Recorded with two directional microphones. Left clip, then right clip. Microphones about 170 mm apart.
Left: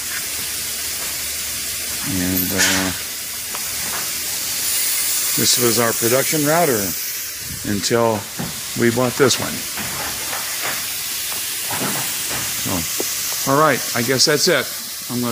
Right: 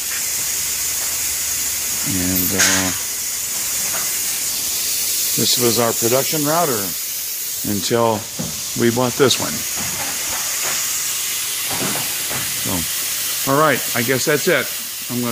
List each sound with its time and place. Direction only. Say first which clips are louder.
5.4 s speech: even; centre (ahead or behind)
6.4 s speech: left 1 dB; 25° left (ahead or behind)
7.9 s speech: even; 5° left (ahead or behind)
13.5 s speech: even; centre (ahead or behind)